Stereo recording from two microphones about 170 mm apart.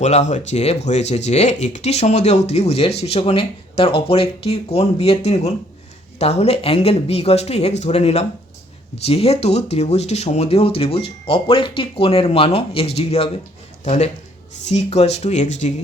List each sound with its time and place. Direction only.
0.0 s speech: 40° left (ahead or behind)